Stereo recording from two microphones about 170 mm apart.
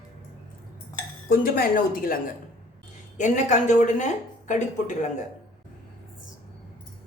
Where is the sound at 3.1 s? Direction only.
45° left (ahead or behind).